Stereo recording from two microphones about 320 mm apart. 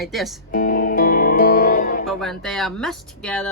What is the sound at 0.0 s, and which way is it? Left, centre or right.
Speech, centre.